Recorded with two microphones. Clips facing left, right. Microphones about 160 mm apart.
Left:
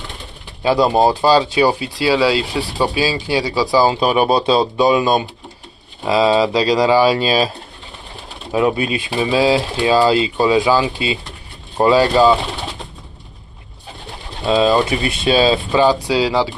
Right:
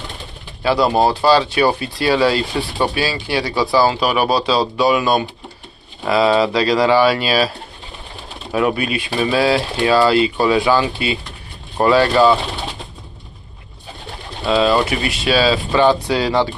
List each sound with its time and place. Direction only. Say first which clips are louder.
0.6 s speech: left 1 dB; 20° left (ahead or behind)
4.0 s speech: left 2 dB; 25° left (ahead or behind)
8.5 s speech: left 1 dB; 25° left (ahead or behind)
14.4 s speech: left 1 dB; 20° left (ahead or behind)
15.8 s speech: even; 10° left (ahead or behind)